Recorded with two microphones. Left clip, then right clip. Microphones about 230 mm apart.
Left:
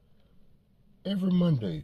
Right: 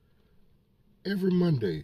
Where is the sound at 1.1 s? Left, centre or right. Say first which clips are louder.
Right 2 dB; right.